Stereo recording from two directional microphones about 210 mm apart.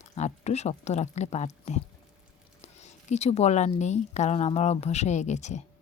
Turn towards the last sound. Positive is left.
turn(degrees=35)  # may be behind; listen again after turning